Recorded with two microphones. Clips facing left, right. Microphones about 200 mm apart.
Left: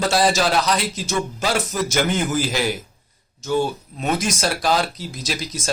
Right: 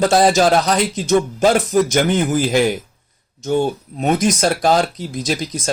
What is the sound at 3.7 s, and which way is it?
Speech, 50° right (ahead or behind).